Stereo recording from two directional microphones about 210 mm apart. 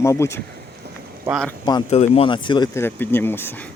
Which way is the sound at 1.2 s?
Centre (ahead or behind).